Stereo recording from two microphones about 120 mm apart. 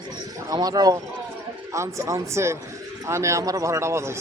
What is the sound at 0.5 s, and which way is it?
Speech, 35° right (ahead or behind).